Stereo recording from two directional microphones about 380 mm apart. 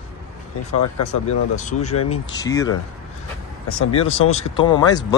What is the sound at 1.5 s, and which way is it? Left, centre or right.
Speech, centre.